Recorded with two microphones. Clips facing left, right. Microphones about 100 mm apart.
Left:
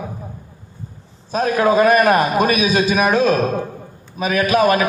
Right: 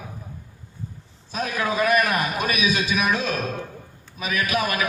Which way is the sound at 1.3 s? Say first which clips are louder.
Left 10 dB; 40° left (ahead or behind).